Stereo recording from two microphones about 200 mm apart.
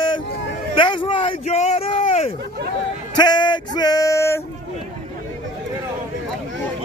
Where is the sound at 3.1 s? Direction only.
20° left (ahead or behind).